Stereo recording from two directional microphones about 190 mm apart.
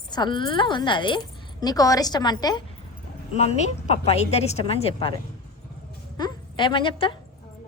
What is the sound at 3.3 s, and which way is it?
A woman's voice, 35° left (ahead or behind).